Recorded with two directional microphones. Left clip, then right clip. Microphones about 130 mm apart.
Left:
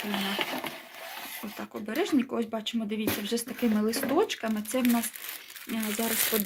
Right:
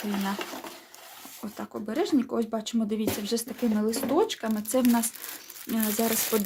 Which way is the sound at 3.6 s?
5° left (ahead or behind).